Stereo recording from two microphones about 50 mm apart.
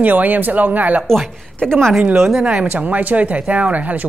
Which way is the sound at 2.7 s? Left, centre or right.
Right.